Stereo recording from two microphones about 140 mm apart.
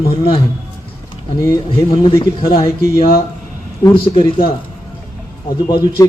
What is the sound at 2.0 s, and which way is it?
Speech, 30° left (ahead or behind).